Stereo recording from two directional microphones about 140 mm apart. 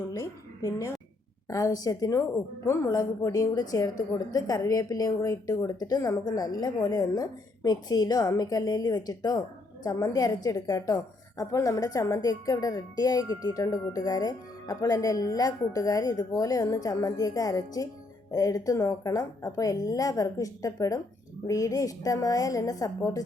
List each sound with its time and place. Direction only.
0.1 s a woman's voice: 20° left (ahead or behind)